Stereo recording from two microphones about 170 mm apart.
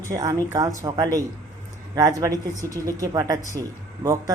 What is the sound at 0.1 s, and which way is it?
Speech, 20° right (ahead or behind).